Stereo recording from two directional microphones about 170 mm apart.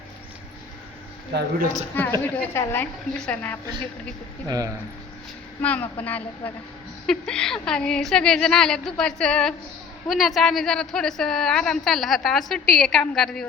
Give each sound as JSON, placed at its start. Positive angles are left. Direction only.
{"t": 1.3, "sound": "speech", "side_deg": -55}
{"t": 2.5, "sound": "a woman's voice", "side_deg": 15}
{"t": 4.4, "sound": "speech", "side_deg": -20}
{"t": 5.6, "sound": "a woman's voice", "side_deg": 10}